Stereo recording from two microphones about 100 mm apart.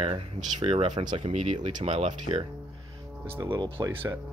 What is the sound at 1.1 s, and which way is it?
Speech, 90° right.